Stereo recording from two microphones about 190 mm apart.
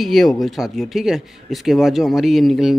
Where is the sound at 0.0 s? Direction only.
Centre (ahead or behind).